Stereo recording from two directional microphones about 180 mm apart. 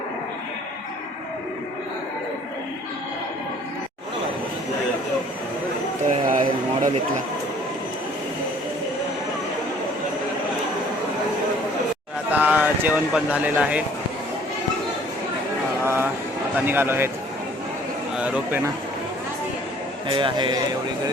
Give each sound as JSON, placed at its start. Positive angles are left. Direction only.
{"t": 6.1, "sound": "music", "side_deg": -45}
{"t": 12.3, "sound": "speech", "side_deg": -10}
{"t": 15.8, "sound": "vehicle", "side_deg": -15}
{"t": 16.6, "sound": "speech", "side_deg": -10}
{"t": 18.2, "sound": "speech", "side_deg": -5}
{"t": 20.1, "sound": "a man's voice", "side_deg": -25}